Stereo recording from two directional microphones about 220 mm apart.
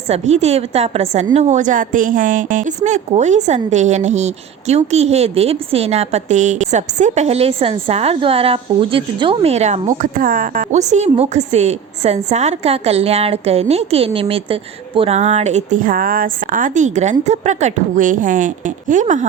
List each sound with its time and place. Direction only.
0.1 s a woman's voice: 30° right (ahead or behind)